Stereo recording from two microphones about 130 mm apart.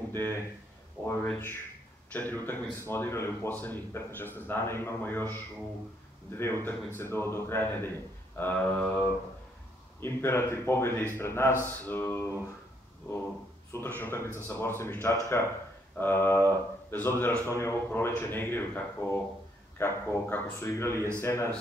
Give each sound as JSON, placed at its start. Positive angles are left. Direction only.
{"t": 0.1, "sound": "speech", "side_deg": -30}
{"t": 1.0, "sound": "speech", "side_deg": 15}
{"t": 13.7, "sound": "speech", "side_deg": 15}